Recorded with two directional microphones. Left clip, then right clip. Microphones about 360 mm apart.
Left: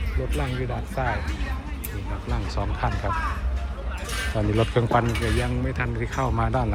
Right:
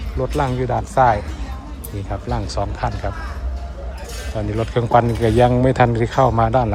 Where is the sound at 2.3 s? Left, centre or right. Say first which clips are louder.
Right 7 dB; centre.